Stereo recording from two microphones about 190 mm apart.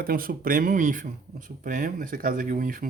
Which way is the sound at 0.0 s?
50° right (ahead or behind).